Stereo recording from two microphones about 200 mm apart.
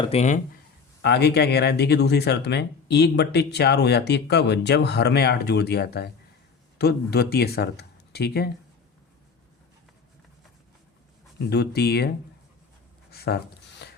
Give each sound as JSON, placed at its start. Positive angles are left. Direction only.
{"t": 0.0, "sound": "speech", "side_deg": 30}
{"t": 1.0, "sound": "speech", "side_deg": 55}
{"t": 11.4, "sound": "speech", "side_deg": 55}
{"t": 13.1, "sound": "a sound", "side_deg": 55}